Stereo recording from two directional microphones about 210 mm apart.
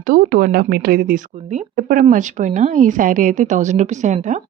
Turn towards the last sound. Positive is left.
turn(degrees=-35)  # may be behind; listen again after turning